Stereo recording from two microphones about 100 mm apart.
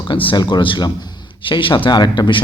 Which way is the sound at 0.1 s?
55° left (ahead or behind).